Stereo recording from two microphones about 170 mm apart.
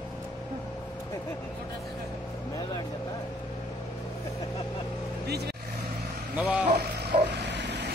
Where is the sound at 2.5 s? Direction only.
25° left (ahead or behind).